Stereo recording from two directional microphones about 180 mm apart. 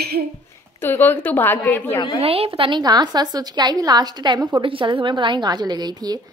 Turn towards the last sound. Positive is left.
turn(degrees=-20)  # may be behind; listen again after turning